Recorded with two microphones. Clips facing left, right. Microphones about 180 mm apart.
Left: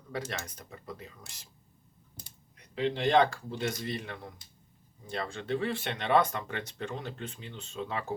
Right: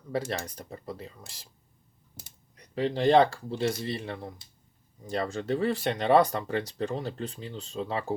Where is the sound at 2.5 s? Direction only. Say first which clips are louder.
Right 2 dB; 40° right (ahead or behind).